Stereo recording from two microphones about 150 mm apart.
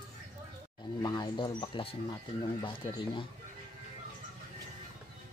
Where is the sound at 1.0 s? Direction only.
30° left (ahead or behind).